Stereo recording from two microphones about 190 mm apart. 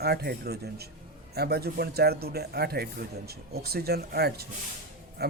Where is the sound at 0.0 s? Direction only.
55° right (ahead or behind).